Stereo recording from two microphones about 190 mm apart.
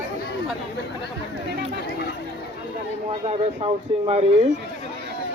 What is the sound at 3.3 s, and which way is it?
Speech, 35° right (ahead or behind).